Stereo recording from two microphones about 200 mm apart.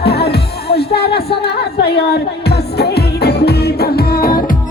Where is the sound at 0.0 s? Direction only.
55° left (ahead or behind).